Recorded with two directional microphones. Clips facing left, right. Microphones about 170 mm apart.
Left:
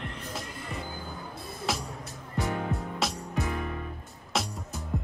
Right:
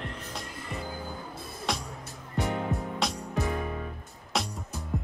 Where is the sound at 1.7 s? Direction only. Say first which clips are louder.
Even; 5° left (ahead or behind).